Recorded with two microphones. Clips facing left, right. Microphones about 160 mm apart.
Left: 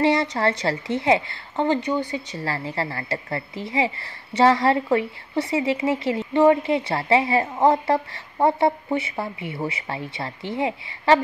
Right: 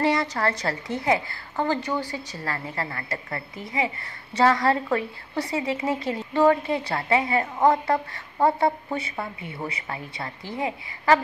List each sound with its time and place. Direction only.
0.0 s a woman's voice: 25° left (ahead or behind)